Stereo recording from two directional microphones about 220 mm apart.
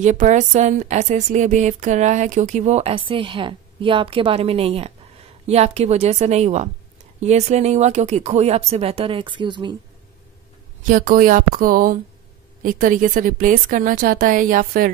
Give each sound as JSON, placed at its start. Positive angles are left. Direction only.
{"t": 0.0, "sound": "speech", "side_deg": -35}
{"t": 10.8, "sound": "speech", "side_deg": -35}